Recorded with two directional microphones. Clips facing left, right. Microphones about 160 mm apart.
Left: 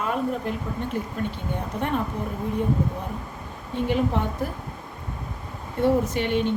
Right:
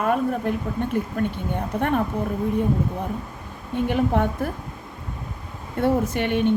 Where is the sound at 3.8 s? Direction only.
55° right (ahead or behind).